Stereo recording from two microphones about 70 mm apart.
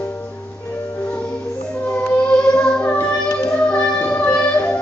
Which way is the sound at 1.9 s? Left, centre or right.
Centre.